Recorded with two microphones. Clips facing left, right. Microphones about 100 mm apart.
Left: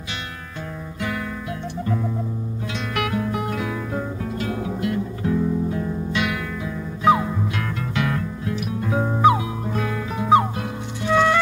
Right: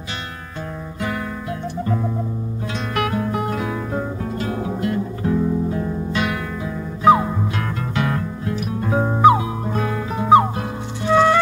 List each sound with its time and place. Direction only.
1.0 s music: 35° right (ahead or behind)